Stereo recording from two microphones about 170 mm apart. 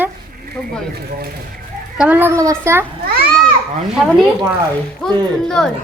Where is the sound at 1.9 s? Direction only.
10° right (ahead or behind).